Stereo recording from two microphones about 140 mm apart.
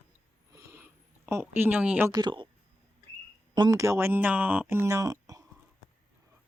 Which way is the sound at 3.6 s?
25° right (ahead or behind).